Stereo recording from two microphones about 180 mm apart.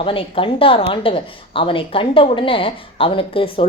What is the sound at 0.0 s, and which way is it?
A woman's voice, 30° left (ahead or behind).